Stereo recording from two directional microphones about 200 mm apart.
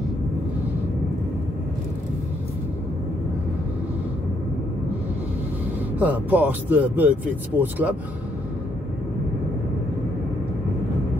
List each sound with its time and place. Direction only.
5.9 s speech: 10° right (ahead or behind)